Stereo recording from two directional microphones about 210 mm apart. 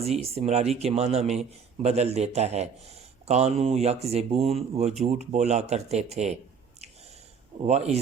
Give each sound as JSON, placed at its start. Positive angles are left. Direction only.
{"t": 0.3, "sound": "speech", "side_deg": -30}
{"t": 7.6, "sound": "speech", "side_deg": -30}